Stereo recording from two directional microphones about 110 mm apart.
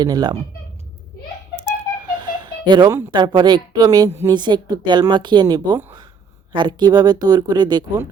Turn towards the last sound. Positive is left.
turn(degrees=-40)  # may be behind; listen again after turning